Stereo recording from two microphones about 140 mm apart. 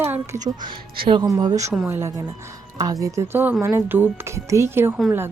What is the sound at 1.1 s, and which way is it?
Speech, 30° right (ahead or behind).